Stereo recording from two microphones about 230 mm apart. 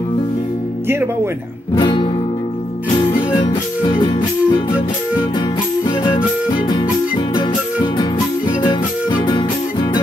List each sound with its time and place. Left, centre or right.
0.8 s speech: centre
1.8 s music: left
3.3 s music: centre
5.9 s music: left